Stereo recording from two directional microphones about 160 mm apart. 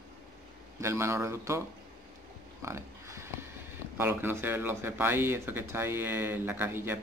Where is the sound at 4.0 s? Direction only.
15° right (ahead or behind).